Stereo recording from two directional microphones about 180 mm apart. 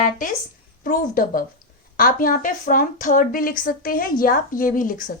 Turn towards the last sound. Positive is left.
turn(degrees=50)  # may be behind; listen again after turning